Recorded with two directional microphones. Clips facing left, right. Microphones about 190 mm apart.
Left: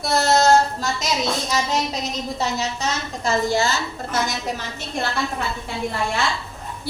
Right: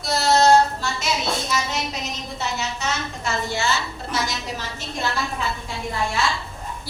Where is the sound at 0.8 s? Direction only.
40° left (ahead or behind).